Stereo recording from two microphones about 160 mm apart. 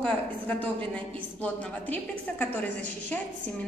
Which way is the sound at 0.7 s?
10° left (ahead or behind).